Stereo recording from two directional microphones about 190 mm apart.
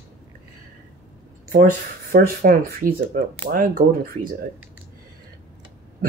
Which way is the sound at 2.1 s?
50° right (ahead or behind).